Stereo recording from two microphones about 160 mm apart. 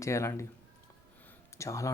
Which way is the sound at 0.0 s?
20° left (ahead or behind).